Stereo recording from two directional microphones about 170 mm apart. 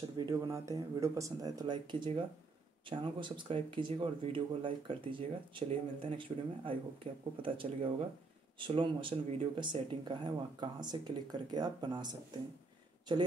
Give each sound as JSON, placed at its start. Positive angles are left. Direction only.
{"t": 0.2, "sound": "speech", "side_deg": -20}